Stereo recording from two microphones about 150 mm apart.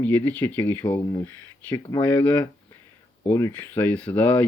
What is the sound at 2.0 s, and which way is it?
Speech, 10° left (ahead or behind).